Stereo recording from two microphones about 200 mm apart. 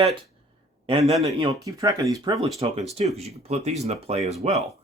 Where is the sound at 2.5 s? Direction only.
30° right (ahead or behind).